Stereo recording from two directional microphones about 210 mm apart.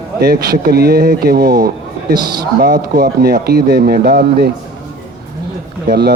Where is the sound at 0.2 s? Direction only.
50° right (ahead or behind).